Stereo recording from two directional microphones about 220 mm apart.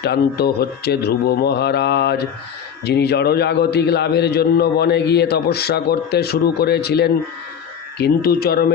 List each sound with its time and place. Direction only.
0.0 s a man's voice: 45° left (ahead or behind)